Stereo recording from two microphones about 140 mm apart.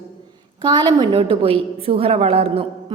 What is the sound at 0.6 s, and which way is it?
A woman's voice, 35° right (ahead or behind).